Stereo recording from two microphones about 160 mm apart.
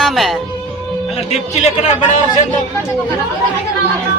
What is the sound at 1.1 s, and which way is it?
Speech, 40° left (ahead or behind).